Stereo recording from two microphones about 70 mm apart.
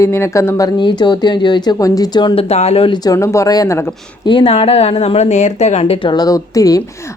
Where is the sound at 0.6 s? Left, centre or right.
Left.